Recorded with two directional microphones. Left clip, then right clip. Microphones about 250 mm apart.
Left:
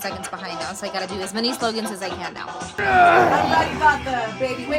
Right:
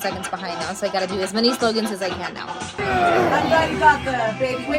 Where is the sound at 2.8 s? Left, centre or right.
Left.